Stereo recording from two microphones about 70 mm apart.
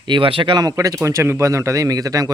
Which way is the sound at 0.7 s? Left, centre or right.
Right.